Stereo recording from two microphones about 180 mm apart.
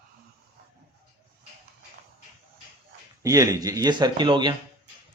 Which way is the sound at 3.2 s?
20° right (ahead or behind).